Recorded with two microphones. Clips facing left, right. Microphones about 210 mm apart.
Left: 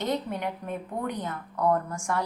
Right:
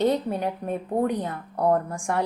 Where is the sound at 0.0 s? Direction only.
35° right (ahead or behind).